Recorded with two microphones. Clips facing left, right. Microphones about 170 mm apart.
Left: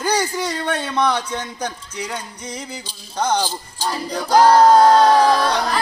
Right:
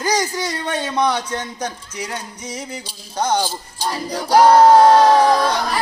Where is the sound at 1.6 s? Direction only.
10° right (ahead or behind).